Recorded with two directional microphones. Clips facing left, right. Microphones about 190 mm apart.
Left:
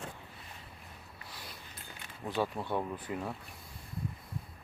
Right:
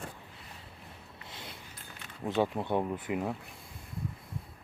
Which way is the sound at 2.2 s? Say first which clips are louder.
Right 4 dB; 20° right (ahead or behind).